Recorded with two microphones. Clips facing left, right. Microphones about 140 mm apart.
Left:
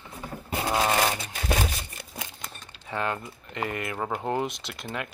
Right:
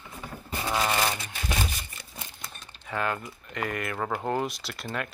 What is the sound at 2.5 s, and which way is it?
Speech, 25° left (ahead or behind).